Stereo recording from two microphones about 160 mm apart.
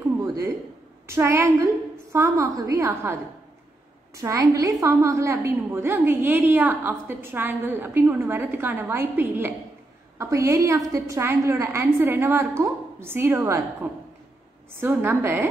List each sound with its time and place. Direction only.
0.0 s a sound: 20° right (ahead or behind)
1.0 s a woman's voice: 15° right (ahead or behind)
4.2 s a woman's voice: 20° right (ahead or behind)